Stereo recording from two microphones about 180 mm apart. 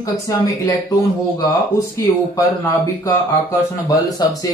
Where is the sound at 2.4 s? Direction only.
20° left (ahead or behind).